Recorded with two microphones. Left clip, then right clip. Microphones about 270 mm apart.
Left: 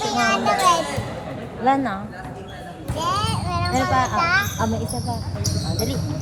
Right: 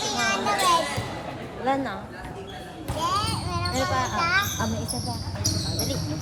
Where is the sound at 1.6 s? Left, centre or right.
Left.